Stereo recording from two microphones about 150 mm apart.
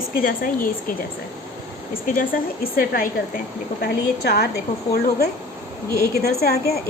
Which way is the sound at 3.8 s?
90° left.